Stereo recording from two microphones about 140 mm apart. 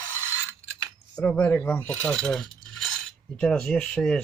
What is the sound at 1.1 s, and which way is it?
Coin, 10° left (ahead or behind).